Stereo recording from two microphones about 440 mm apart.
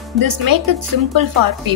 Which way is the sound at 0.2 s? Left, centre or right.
Right.